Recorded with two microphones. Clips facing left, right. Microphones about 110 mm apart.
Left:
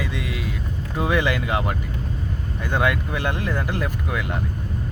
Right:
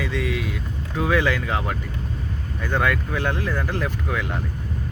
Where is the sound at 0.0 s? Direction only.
10° left (ahead or behind).